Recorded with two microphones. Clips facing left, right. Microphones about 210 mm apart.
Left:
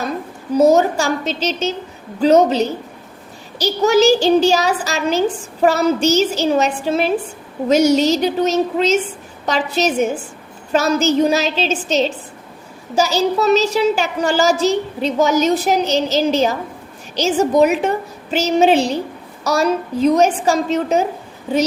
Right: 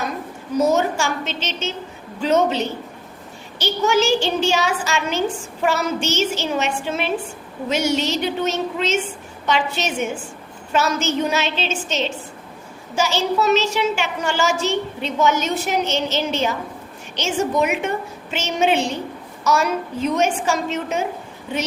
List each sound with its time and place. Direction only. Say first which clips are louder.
0.5 s a child's voice: left 6 dB; 35° left (ahead or behind)